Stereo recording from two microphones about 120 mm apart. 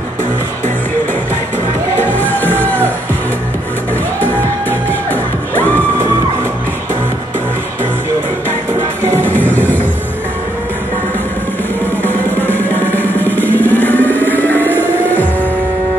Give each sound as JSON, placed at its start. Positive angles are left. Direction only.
{"t": 2.0, "sound": "music", "side_deg": 15}
{"t": 4.2, "sound": "music", "side_deg": 15}
{"t": 9.2, "sound": "music", "side_deg": 15}
{"t": 12.0, "sound": "music", "side_deg": 15}